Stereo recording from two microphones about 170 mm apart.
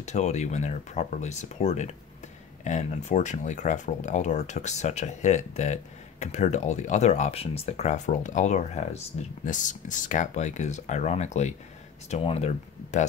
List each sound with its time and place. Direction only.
0.0 s speech: 40° left (ahead or behind)